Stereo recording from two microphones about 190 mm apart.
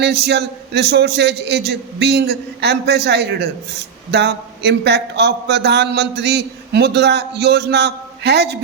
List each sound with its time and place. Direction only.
0.0 s a man's voice: 60° right (ahead or behind)